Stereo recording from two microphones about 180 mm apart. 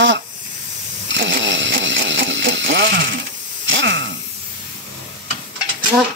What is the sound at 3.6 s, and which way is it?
Hiss, 90° right.